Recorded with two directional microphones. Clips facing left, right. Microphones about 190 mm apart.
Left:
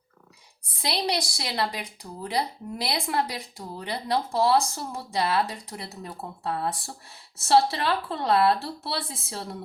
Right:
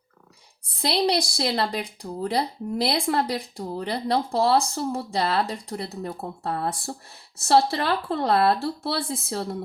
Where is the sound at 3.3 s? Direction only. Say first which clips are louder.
Right 7 dB; 45° right (ahead or behind).